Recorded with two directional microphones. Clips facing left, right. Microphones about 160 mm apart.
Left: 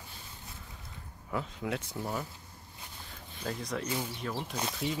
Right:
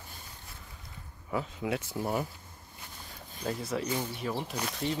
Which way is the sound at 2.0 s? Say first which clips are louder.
Right 7 dB; 15° right (ahead or behind).